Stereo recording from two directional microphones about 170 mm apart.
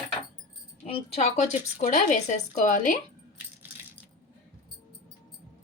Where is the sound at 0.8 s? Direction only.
35° left (ahead or behind).